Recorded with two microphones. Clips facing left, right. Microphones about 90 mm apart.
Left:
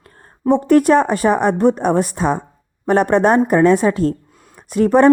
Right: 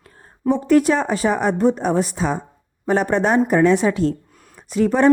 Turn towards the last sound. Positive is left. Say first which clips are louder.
# left 5 dB
turn(degrees=50)  # may be behind; listen again after turning